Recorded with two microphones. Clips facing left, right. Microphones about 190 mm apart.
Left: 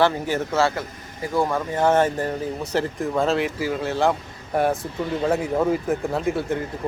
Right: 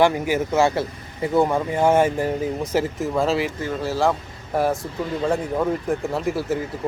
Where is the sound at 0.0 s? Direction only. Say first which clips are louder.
Right 2 dB; 10° right (ahead or behind).